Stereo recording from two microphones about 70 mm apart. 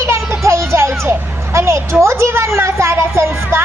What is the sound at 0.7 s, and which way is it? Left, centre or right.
Music, right.